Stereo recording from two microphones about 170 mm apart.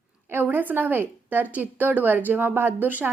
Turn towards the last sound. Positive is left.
turn(degrees=-10)  # may be behind; listen again after turning